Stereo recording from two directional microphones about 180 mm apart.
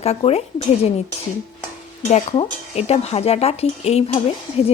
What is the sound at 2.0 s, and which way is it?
A woman's voice, 35° left (ahead or behind).